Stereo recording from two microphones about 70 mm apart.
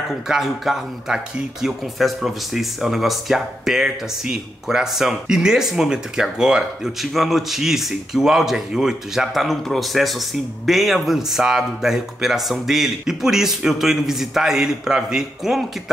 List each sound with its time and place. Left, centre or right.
0.3 s speech: centre